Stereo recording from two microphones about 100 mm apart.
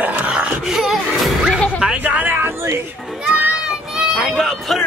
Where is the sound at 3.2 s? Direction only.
10° right (ahead or behind).